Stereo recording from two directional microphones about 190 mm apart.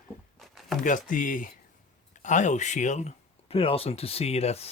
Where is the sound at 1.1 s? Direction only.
45° left (ahead or behind).